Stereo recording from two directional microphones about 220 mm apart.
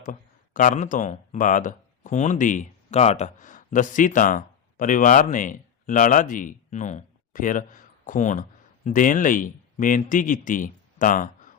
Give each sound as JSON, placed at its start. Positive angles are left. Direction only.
{"t": 0.0, "sound": "speech", "side_deg": 35}